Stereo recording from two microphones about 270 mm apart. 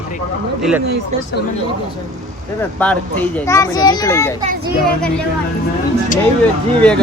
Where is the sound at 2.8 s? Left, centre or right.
Centre.